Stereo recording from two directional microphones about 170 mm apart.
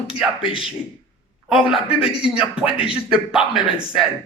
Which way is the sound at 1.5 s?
5° right (ahead or behind).